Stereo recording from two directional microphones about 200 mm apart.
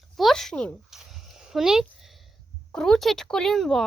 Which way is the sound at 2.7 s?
5° left (ahead or behind).